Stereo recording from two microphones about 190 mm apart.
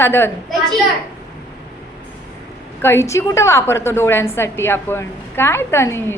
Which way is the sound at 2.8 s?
15° left (ahead or behind).